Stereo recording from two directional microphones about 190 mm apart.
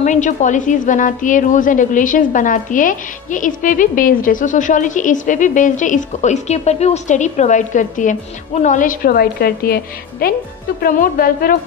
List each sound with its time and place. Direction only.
0.0 s a woman's voice: 40° left (ahead or behind)
10.8 s a woman's voice: 45° left (ahead or behind)